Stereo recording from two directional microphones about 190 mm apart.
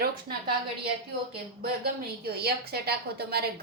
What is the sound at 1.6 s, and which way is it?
A woman's voice, 55° right (ahead or behind).